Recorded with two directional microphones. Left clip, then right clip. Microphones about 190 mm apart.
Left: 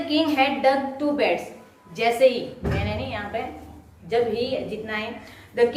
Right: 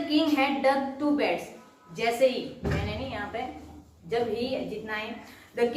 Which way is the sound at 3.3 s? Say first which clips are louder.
Left 5 dB; 25° left (ahead or behind).